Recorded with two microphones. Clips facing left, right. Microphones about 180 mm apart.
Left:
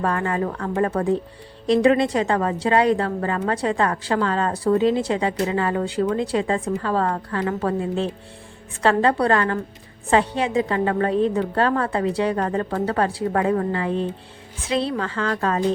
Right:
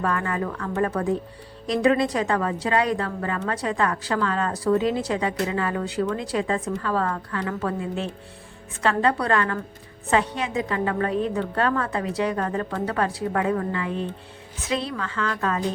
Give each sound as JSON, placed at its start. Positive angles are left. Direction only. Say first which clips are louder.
{"t": 0.0, "sound": "a woman's voice", "louder": "left 3 dB", "side_deg": 30}